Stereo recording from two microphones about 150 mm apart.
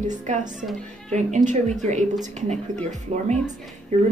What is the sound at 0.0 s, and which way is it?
Speech, 55° right (ahead or behind).